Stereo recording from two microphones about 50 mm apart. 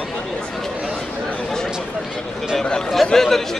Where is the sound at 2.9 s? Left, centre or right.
Centre.